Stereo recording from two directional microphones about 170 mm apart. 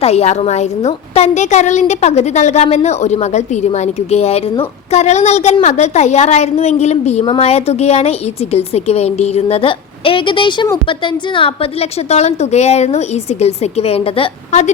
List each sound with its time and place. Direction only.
0.0 s a woman's voice: 40° left (ahead or behind)